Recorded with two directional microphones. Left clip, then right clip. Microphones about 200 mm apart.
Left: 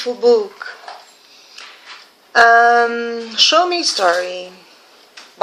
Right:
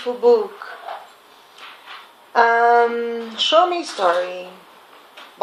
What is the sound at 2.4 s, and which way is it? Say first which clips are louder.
Speech: left 4 dB; 25° left (ahead or behind).